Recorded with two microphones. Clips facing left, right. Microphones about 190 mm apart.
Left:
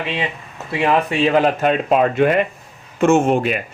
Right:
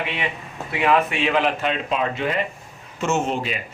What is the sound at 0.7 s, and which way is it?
Speech, 30° left (ahead or behind).